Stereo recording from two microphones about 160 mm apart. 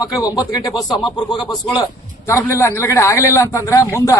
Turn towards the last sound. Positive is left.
turn(degrees=20)  # may be behind; listen again after turning